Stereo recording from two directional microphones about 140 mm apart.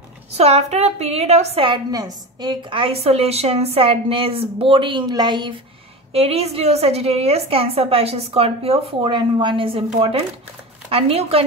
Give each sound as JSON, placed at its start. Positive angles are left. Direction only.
{"t": 0.4, "sound": "a woman's voice", "side_deg": -50}
{"t": 1.7, "sound": "a woman's voice", "side_deg": -25}
{"t": 6.1, "sound": "a woman's voice", "side_deg": -45}